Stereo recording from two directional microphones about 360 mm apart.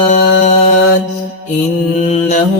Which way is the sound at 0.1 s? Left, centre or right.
Centre.